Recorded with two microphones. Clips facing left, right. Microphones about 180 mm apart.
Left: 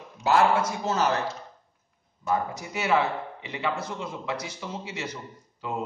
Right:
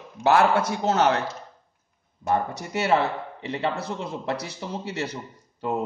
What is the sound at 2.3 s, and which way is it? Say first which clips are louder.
A man's voice: right 3 dB; 65° right (ahead or behind).